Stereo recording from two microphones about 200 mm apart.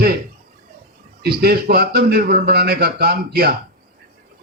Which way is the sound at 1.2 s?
50° right (ahead or behind).